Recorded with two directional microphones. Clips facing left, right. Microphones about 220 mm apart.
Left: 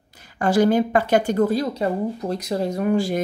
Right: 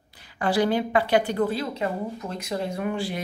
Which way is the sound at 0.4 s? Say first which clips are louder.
Left 5 dB; 45° left (ahead or behind).